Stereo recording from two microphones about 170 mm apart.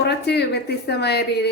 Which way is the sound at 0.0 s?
80° left.